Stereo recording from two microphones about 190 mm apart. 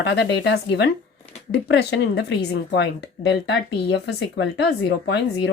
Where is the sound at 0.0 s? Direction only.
65° left (ahead or behind).